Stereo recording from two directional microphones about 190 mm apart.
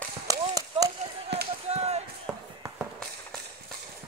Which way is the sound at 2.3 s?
Centre (ahead or behind).